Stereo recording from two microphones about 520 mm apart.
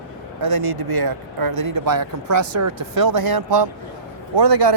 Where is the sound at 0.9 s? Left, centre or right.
Right.